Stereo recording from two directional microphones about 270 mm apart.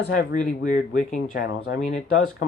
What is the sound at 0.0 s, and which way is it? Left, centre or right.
Speech, left.